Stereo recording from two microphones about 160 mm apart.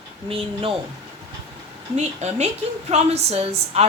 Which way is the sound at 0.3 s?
35° right (ahead or behind).